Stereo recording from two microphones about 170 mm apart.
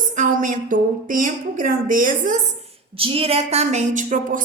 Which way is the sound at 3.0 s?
35° right (ahead or behind).